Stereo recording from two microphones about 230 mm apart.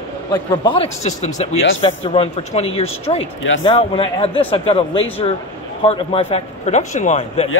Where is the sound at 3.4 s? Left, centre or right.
Left.